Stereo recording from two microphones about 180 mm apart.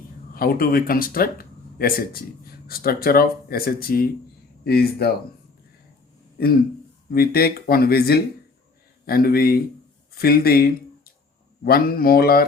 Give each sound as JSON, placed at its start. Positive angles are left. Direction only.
{"t": 0.3, "sound": "speech", "side_deg": 55}
{"t": 7.1, "sound": "speech", "side_deg": 60}